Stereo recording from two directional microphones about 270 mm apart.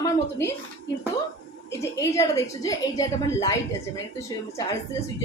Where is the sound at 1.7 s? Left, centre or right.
Centre.